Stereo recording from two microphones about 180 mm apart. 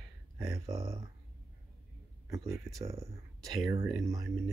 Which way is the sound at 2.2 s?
15° right (ahead or behind).